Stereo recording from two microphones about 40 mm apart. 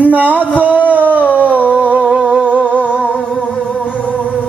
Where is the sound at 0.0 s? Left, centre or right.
Right.